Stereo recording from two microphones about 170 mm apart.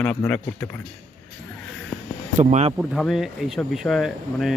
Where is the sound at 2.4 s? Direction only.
45° right (ahead or behind).